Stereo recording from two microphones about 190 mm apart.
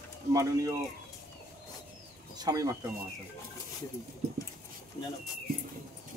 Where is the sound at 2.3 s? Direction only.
20° right (ahead or behind).